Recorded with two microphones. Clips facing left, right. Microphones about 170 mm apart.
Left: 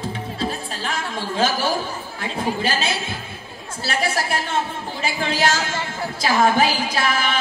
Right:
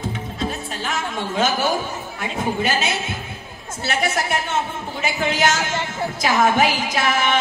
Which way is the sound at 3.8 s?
30° left (ahead or behind).